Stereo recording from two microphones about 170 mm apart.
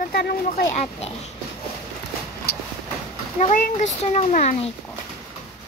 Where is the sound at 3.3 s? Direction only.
45° left (ahead or behind).